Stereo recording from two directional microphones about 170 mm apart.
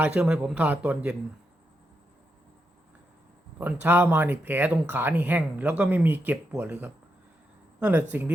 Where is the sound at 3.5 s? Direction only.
10° right (ahead or behind).